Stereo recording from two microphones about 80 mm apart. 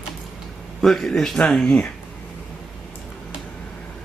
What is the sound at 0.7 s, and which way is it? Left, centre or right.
Speech, centre.